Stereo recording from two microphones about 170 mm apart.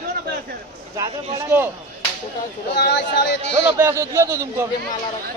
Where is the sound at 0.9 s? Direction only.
15° right (ahead or behind).